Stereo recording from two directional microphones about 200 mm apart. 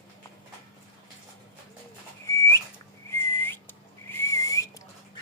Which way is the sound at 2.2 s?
15° left (ahead or behind).